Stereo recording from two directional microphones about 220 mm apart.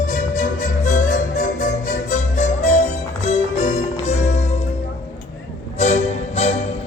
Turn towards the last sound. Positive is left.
turn(degrees=30)  # may be behind; listen again after turning